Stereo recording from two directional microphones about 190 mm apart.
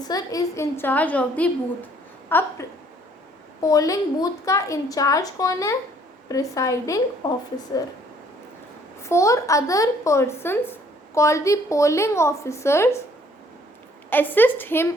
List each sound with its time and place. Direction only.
0.1 s speech: 20° left (ahead or behind)
3.6 s speech: 20° left (ahead or behind)
9.0 s speech: 15° left (ahead or behind)
14.1 s speech: 10° left (ahead or behind)